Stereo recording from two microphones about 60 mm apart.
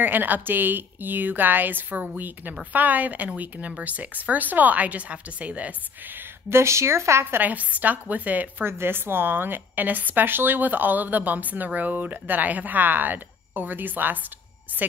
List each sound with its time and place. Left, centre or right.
0.0 s a woman's voice: right
6.5 s speech: right
7.4 s a woman's voice: right
8.6 s a woman's voice: right